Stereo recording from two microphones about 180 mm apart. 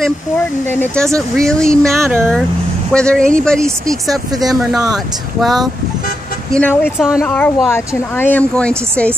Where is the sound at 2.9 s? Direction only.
5° left (ahead or behind).